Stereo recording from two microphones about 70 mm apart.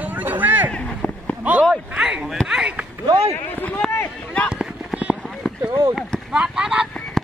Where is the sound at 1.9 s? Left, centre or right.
Centre.